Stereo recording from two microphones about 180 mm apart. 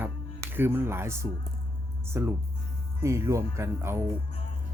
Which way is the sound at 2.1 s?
15° right (ahead or behind).